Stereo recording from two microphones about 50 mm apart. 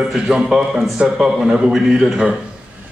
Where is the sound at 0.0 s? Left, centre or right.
Centre.